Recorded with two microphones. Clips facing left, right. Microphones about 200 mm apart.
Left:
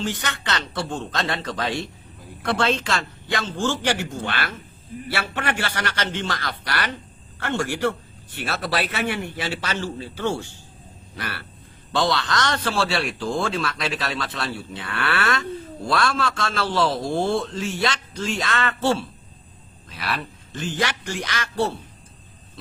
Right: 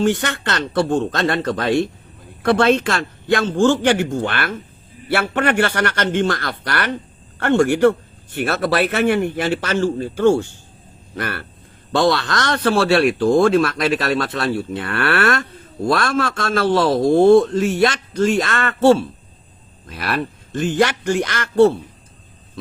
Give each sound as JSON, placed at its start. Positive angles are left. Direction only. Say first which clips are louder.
{"t": 0.0, "sound": "a man's voice", "louder": "right 9 dB", "side_deg": -55}